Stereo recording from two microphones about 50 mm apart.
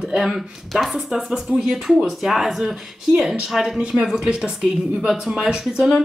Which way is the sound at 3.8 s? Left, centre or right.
Centre.